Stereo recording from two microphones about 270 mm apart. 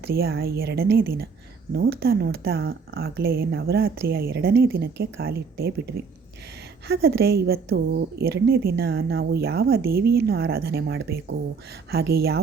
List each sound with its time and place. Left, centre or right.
0.0 s a woman's voice: right